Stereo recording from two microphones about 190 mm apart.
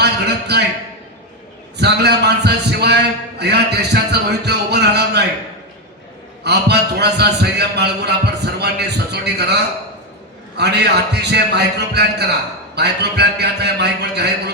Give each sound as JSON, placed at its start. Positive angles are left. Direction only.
{"t": 0.0, "sound": "a sound", "side_deg": -60}
{"t": 1.8, "sound": "a man's voice", "side_deg": -60}
{"t": 6.4, "sound": "a man's voice", "side_deg": -60}
{"t": 10.6, "sound": "a man's voice", "side_deg": -60}